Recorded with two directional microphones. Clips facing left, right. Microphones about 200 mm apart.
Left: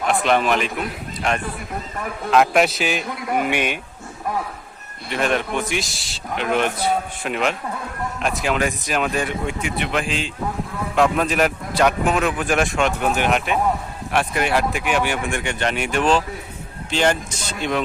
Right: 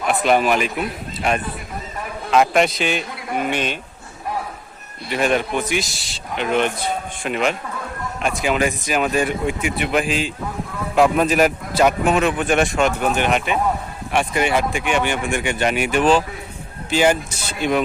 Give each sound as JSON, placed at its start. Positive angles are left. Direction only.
{"t": 0.1, "sound": "a man's voice", "side_deg": -5}
{"t": 5.0, "sound": "a man's voice", "side_deg": -5}